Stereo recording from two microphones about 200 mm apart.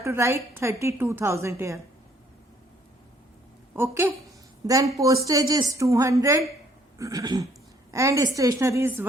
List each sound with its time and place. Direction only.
0.0 s a woman's voice: 15° right (ahead or behind)
3.8 s a woman's voice: 10° right (ahead or behind)